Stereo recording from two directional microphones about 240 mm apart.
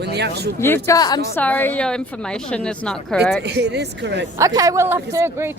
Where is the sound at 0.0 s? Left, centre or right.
Right.